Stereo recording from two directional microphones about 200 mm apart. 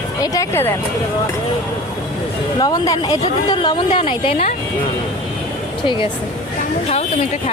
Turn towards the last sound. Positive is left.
turn(degrees=25)  # may be behind; listen again after turning